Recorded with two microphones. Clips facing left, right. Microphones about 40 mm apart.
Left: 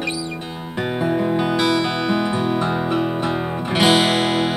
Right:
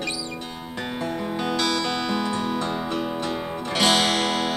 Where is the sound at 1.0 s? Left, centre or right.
Centre.